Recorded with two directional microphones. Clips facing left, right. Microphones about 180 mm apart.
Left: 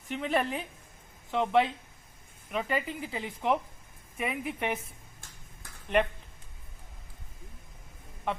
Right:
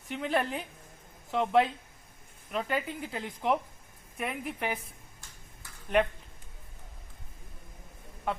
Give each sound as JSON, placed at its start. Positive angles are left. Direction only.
{"t": 0.1, "sound": "speech", "side_deg": 0}
{"t": 5.9, "sound": "speech", "side_deg": 0}